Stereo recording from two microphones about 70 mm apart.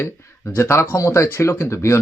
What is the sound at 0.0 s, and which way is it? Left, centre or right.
Speech, left.